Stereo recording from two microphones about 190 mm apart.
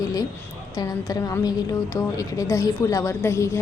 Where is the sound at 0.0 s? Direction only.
20° left (ahead or behind).